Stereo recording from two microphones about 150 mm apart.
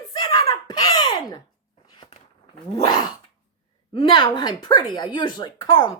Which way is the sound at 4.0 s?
30° left (ahead or behind).